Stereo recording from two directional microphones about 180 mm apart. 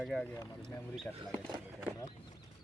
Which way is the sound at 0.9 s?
Centre (ahead or behind).